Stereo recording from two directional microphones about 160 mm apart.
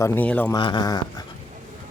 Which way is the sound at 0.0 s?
10° left (ahead or behind).